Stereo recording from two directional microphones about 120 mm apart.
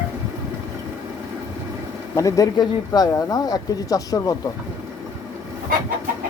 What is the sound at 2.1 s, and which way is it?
Speech, 30° left (ahead or behind).